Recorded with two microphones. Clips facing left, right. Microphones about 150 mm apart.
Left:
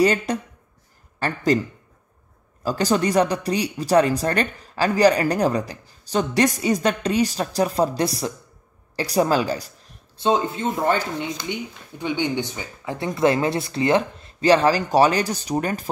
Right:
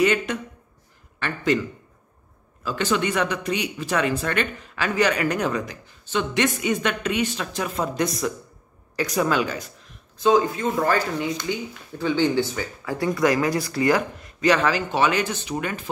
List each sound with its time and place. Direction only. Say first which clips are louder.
0.0 s a woman's voice: left 2 dB; 35° left (ahead or behind)
2.6 s a woman's voice: left 3 dB; 40° left (ahead or behind)